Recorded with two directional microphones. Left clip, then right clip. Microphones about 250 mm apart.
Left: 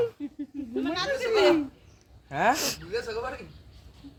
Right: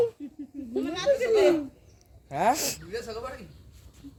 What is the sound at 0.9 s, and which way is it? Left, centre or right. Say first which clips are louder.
Speech: right 4 dB; centre.